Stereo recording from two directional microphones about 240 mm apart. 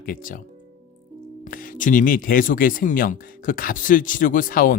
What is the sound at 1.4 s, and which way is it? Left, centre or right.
Speech, left.